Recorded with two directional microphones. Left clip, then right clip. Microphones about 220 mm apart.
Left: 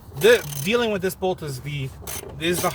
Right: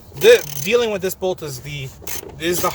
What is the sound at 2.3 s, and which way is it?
Filing, 35° right (ahead or behind).